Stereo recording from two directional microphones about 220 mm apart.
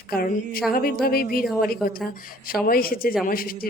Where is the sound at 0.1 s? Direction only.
40° left (ahead or behind).